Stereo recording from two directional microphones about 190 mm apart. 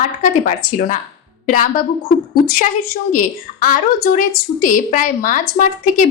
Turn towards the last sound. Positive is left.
turn(degrees=45)  # may be behind; listen again after turning